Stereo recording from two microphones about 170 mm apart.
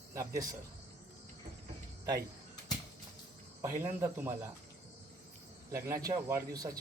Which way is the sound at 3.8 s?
15° right (ahead or behind).